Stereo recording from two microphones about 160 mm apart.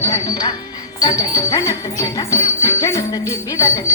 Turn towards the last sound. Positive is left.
turn(degrees=20)  # may be behind; listen again after turning